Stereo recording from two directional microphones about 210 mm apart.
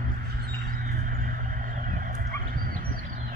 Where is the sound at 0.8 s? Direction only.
45° right (ahead or behind).